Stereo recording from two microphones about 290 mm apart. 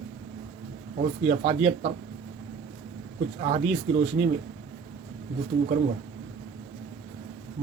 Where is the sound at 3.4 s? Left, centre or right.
Right.